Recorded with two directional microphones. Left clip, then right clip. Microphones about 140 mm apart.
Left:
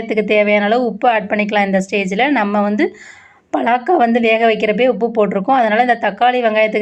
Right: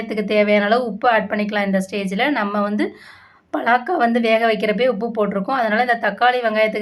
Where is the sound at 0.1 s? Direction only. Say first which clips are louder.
Left 4 dB; 30° left (ahead or behind).